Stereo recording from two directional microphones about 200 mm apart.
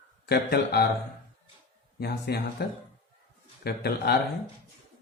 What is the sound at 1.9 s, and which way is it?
Speech, 55° left (ahead or behind).